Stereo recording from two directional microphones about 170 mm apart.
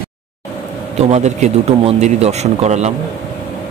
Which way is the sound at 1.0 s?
40° right (ahead or behind).